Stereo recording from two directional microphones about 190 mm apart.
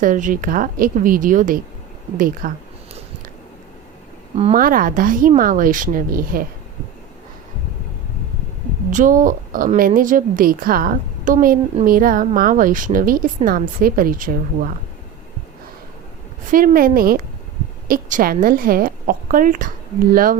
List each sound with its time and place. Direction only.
0.0 s a woman's voice: 45° right (ahead or behind)
4.5 s a woman's voice: 50° right (ahead or behind)
8.9 s a woman's voice: 45° right (ahead or behind)
16.5 s a woman's voice: 45° right (ahead or behind)